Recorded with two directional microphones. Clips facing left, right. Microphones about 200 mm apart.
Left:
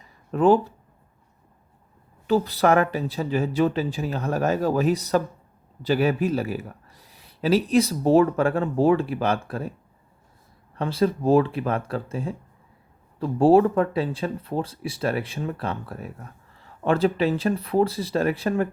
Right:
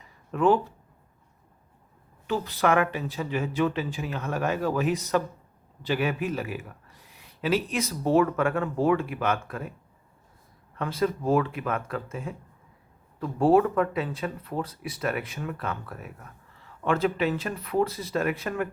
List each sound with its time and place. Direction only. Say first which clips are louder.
0.0 s a sound: left 4 dB; 35° left (ahead or behind)
2.2 s speech: left 5 dB; 35° left (ahead or behind)
10.8 s speech: left 4 dB; 30° left (ahead or behind)